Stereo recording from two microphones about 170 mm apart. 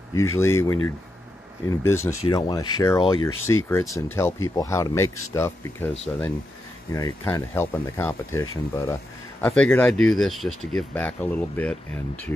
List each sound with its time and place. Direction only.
0.1 s speech: 15° left (ahead or behind)